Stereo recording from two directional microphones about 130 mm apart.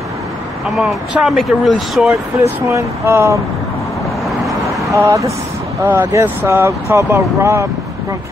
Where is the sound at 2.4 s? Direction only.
25° right (ahead or behind).